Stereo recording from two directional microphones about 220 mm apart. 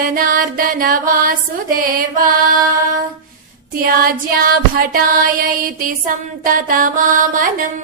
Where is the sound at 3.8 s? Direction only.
40° right (ahead or behind).